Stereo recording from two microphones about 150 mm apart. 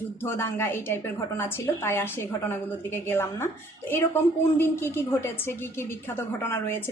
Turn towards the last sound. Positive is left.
turn(degrees=15)  # may be behind; listen again after turning